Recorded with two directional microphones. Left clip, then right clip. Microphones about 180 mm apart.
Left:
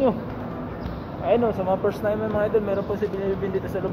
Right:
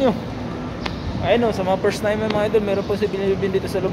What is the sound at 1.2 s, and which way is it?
Speech, centre (ahead or behind).